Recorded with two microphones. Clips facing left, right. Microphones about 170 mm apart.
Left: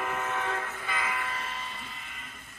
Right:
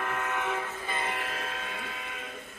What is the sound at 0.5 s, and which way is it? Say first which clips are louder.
Train: right 1 dB; 20° right (ahead or behind).